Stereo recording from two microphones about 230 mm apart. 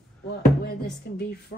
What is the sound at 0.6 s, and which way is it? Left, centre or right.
Speech, left.